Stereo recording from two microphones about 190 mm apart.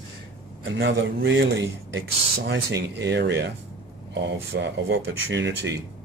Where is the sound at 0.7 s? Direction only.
65° right (ahead or behind).